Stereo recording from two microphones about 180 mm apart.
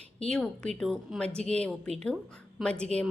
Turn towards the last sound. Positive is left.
turn(degrees=5)  # may be behind; listen again after turning